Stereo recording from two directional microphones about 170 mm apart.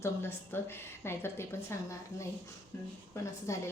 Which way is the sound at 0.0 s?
15° left (ahead or behind).